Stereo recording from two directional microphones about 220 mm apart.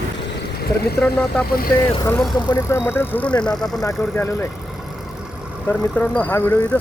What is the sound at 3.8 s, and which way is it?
Speech, 15° left (ahead or behind).